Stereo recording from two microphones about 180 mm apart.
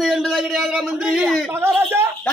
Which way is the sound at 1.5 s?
15° right (ahead or behind).